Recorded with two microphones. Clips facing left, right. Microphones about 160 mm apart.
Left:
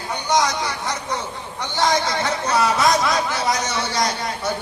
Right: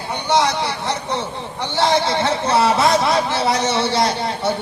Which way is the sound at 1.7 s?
30° right (ahead or behind).